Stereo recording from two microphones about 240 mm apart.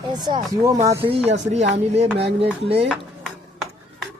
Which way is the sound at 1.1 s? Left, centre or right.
Right.